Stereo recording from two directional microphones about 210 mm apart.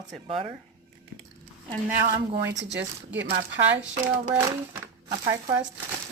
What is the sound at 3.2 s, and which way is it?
Speech, 55° right (ahead or behind).